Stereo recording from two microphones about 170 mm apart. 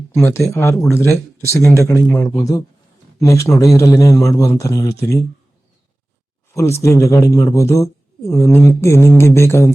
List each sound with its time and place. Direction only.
0.1 s speech: 15° left (ahead or behind)
6.5 s speech: 15° left (ahead or behind)